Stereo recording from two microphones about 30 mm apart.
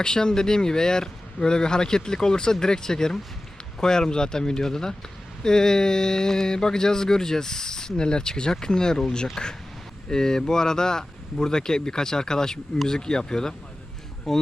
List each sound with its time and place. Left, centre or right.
0.0 s speech: left
14.3 s speech: centre